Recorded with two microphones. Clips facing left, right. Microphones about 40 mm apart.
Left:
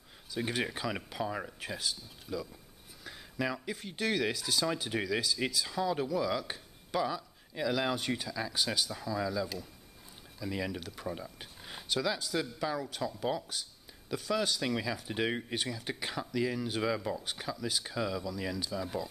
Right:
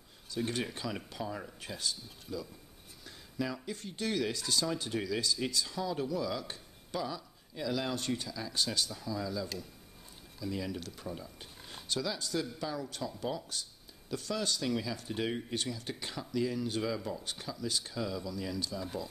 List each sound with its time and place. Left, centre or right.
0.3 s speech: centre
1.6 s speech: centre
16.8 s speech: left
17.2 s speech: centre